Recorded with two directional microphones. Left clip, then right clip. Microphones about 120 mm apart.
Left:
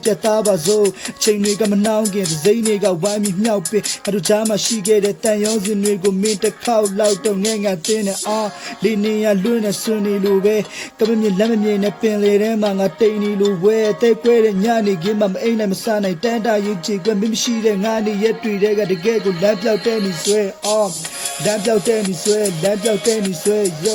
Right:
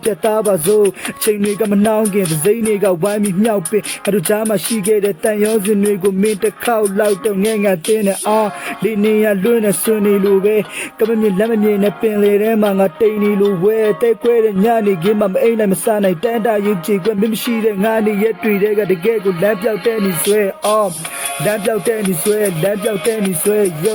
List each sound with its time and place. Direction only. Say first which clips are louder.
0.0 s music: right 1 dB; 10° right (ahead or behind)
20.0 s music: right 3 dB; 35° left (ahead or behind)
21.7 s music: even; 5° right (ahead or behind)